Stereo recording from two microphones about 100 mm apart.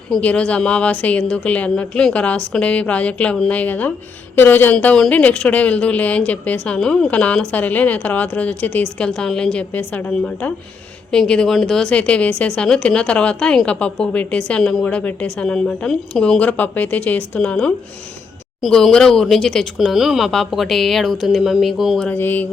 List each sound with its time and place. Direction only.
0.2 s speech: 15° left (ahead or behind)
22.1 s mantra: 20° left (ahead or behind)